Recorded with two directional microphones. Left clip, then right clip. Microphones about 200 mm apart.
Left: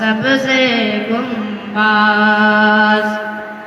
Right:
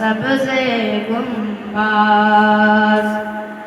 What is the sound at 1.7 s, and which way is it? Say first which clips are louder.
Mantra: left 2 dB; 20° left (ahead or behind).